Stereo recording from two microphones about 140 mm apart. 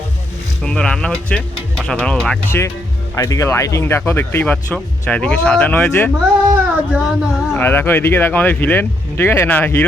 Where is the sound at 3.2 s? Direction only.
20° left (ahead or behind).